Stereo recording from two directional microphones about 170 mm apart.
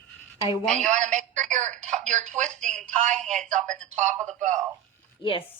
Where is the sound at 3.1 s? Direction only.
5° left (ahead or behind).